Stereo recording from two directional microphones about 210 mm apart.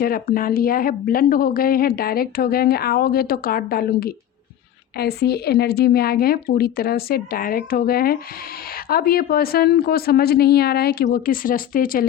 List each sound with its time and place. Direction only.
0.0 s a woman's voice: 45° left (ahead or behind)